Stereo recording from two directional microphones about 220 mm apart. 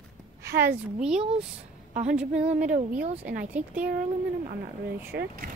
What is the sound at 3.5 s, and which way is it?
Speech, 5° right (ahead or behind).